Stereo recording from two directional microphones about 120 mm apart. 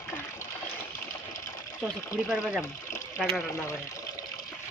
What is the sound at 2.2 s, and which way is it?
Speech, 5° right (ahead or behind).